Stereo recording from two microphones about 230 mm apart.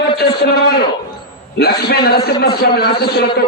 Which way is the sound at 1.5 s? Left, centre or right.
Left.